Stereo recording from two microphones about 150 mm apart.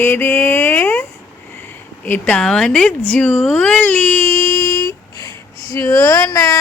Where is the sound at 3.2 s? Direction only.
Centre (ahead or behind).